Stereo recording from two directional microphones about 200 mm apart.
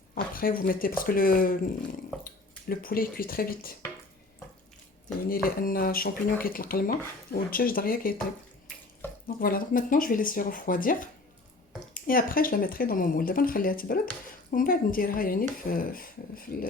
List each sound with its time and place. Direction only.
0.1 s speech: 45° left (ahead or behind)
2.6 s speech: 45° left (ahead or behind)
5.3 s speech: 45° left (ahead or behind)
9.2 s speech: 45° left (ahead or behind)